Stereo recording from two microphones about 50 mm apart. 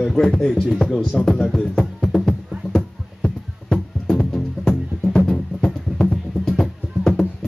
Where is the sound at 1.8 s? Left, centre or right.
Centre.